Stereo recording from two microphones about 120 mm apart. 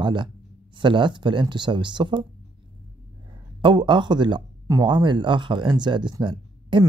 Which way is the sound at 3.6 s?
40° right (ahead or behind).